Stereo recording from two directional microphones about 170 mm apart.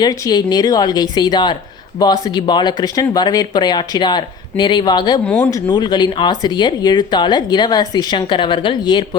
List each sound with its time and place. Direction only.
0.0 s speech: 25° left (ahead or behind)
5.2 s speech: 5° left (ahead or behind)
5.6 s speech: 25° left (ahead or behind)